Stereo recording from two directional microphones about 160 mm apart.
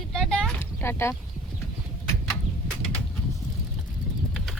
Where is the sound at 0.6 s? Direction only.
15° left (ahead or behind).